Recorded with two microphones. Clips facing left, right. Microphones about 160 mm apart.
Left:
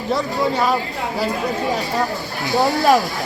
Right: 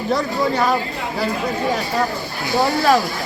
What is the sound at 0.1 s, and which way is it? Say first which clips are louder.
Speech: even; centre (ahead or behind).